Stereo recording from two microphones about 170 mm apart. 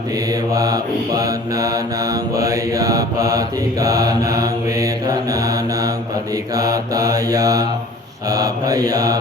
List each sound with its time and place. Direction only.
0.5 s mantra: 20° right (ahead or behind)